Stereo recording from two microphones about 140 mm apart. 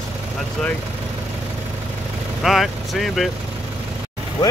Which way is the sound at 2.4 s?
Centre (ahead or behind).